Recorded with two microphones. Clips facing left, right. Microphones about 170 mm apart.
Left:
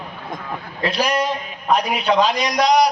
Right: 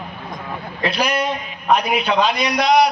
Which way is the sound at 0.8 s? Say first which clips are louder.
Even; 35° left (ahead or behind).